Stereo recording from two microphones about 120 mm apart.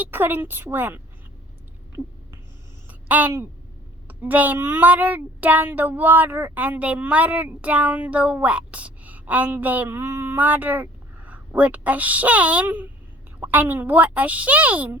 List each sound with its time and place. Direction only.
0.0 s speech: 15° right (ahead or behind)
2.8 s a sound: 15° right (ahead or behind)
4.1 s speech: 15° right (ahead or behind)